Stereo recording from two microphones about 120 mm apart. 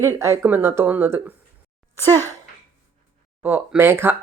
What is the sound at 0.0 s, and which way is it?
Speech, 25° right (ahead or behind).